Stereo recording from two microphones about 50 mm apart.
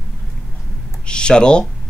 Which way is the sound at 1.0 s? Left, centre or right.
Centre.